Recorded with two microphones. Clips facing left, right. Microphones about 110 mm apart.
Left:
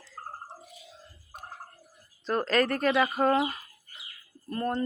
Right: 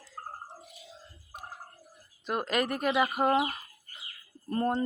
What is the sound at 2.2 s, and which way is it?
Speech, 10° right (ahead or behind).